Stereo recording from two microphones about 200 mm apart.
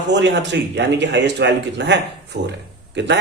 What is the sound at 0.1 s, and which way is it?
A man's voice, 60° right (ahead or behind).